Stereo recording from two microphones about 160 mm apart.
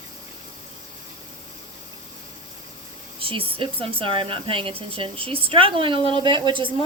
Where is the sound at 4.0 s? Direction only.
35° right (ahead or behind).